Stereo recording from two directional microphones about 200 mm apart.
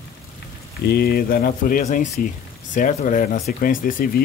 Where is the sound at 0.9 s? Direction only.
50° left (ahead or behind).